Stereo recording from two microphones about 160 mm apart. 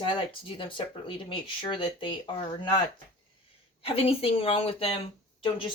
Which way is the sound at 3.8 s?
35° left (ahead or behind).